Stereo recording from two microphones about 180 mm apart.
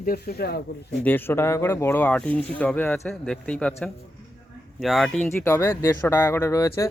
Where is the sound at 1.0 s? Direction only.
10° left (ahead or behind).